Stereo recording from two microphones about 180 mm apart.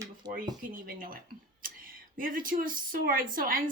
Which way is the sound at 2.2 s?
50° right (ahead or behind).